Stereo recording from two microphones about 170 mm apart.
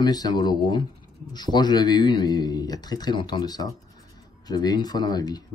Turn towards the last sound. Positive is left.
turn(degrees=25)  # may be behind; listen again after turning